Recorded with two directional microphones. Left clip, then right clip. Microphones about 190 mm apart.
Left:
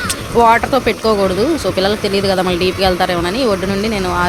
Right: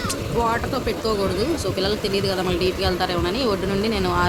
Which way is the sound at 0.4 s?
40° left (ahead or behind).